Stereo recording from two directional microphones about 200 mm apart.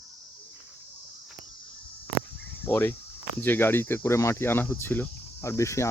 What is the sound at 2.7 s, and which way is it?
Speech, 10° left (ahead or behind).